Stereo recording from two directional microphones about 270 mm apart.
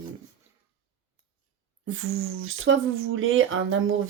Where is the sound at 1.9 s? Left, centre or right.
Right.